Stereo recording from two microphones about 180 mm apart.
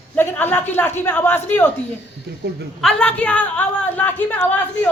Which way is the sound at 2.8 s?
5° left (ahead or behind).